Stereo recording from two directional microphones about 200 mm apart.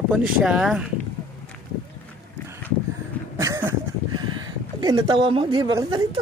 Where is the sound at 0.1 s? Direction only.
5° right (ahead or behind).